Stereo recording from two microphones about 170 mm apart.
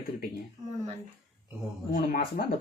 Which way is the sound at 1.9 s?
55° left (ahead or behind).